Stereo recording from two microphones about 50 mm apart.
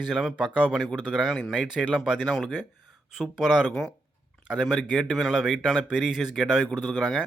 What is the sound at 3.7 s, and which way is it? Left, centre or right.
Speech, centre.